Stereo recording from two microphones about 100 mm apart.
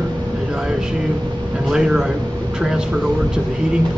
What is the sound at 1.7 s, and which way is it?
Speech, 5° right (ahead or behind).